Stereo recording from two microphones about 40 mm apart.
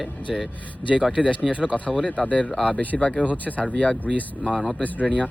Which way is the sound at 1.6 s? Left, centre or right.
Left.